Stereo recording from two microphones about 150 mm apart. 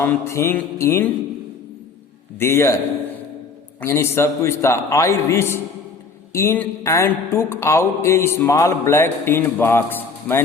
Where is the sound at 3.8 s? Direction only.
15° left (ahead or behind).